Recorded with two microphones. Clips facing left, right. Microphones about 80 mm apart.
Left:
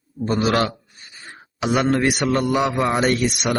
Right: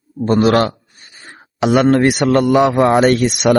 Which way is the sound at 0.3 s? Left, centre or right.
Right.